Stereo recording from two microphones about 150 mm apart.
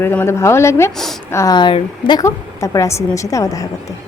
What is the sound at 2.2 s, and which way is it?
A woman's voice, 20° left (ahead or behind).